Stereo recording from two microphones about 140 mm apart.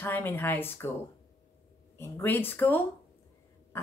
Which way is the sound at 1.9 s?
20° left (ahead or behind).